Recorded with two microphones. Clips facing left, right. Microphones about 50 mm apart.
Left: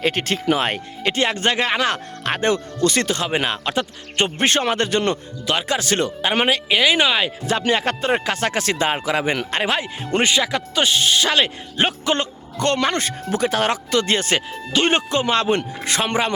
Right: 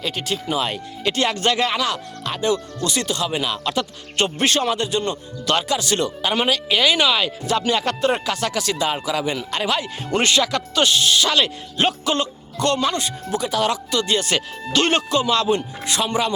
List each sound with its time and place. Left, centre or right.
0.0 s speech: left
1.0 s speech: left
5.6 s speech: left
10.2 s speech: centre
10.9 s speech: left
14.7 s speech: centre
14.9 s speech: left